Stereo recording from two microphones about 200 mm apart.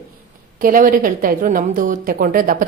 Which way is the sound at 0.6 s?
45° right (ahead or behind).